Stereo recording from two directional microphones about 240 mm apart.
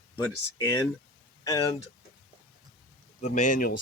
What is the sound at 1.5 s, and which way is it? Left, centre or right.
Speech, centre.